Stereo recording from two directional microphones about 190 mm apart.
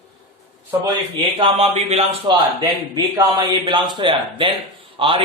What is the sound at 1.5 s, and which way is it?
A man's voice, 30° right (ahead or behind).